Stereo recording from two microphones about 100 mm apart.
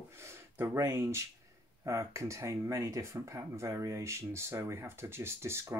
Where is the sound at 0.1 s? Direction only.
25° right (ahead or behind).